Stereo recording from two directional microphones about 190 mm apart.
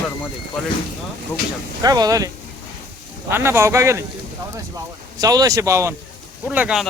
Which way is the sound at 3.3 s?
15° right (ahead or behind).